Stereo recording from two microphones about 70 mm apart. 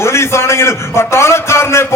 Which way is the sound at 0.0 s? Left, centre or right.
Left.